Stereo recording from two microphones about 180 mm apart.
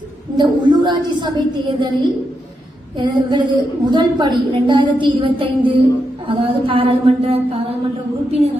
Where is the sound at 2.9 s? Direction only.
25° right (ahead or behind).